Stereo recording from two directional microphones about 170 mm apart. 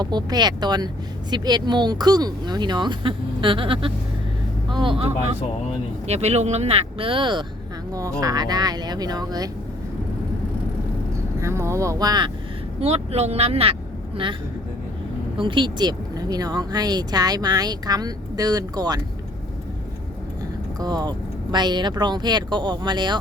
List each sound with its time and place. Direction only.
0.0 s speech: 25° right (ahead or behind)
11.3 s speech: 15° right (ahead or behind)
12.8 s speech: 40° right (ahead or behind)
15.4 s speech: 30° right (ahead or behind)
20.7 s speech: 25° right (ahead or behind)